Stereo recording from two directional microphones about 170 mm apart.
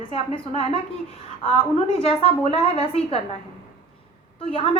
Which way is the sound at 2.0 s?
35° left (ahead or behind).